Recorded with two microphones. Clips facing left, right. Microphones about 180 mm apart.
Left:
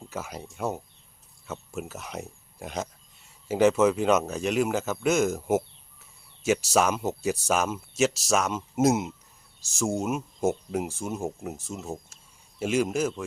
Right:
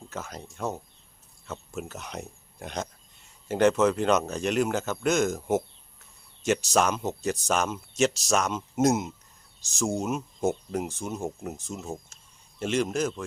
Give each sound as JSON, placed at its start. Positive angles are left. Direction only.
{"t": 0.1, "sound": "speech", "side_deg": 10}